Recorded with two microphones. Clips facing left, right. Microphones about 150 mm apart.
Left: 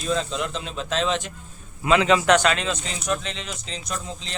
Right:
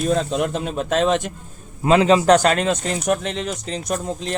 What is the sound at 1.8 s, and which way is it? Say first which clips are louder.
Speech: right 4 dB; 35° right (ahead or behind).